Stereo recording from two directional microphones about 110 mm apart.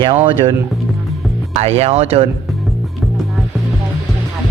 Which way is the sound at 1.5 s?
75° right (ahead or behind).